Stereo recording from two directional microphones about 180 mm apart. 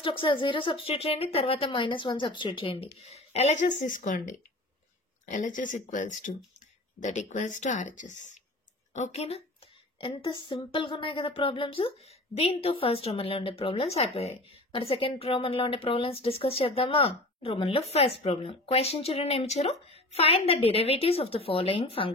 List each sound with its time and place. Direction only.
0.0 s speech: 30° left (ahead or behind)
9.9 s speech: 30° left (ahead or behind)